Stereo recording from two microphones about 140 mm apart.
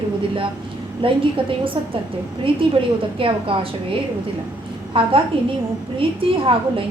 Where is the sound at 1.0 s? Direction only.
40° right (ahead or behind).